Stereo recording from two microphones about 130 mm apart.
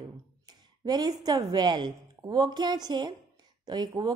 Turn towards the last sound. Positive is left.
turn(degrees=-35)  # may be behind; listen again after turning